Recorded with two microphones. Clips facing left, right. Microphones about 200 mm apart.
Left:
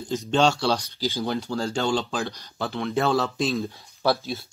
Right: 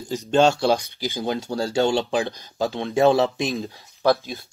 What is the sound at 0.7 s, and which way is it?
Speech, 55° right (ahead or behind).